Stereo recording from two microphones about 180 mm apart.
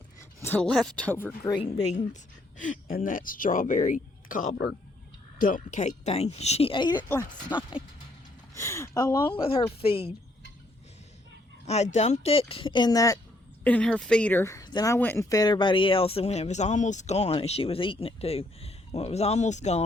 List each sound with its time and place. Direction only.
0.4 s speech: 5° left (ahead or behind)
2.6 s speech: 45° left (ahead or behind); by 9.2 s 15° left (ahead or behind)
9.3 s speech: 30° left (ahead or behind)
11.6 s speech: 35° left (ahead or behind); by 13.1 s 20° left (ahead or behind)
13.7 s speech: 5° left (ahead or behind); by 19.8 s 40° left (ahead or behind)